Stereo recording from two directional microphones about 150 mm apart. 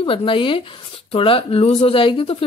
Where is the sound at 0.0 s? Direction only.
35° left (ahead or behind).